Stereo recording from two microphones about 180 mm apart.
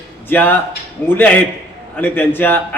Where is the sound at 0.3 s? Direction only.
10° left (ahead or behind).